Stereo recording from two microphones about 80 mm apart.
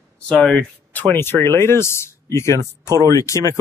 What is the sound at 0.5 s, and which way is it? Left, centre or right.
Speech, left.